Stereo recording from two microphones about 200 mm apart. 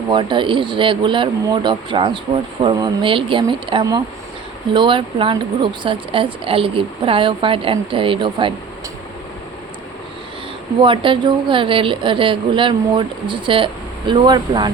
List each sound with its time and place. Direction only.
0.1 s speech: 25° right (ahead or behind)
10.8 s speech: 25° right (ahead or behind)